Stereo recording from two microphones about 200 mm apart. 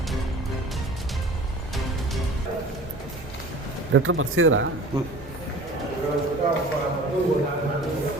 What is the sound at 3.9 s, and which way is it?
Speech, 80° right.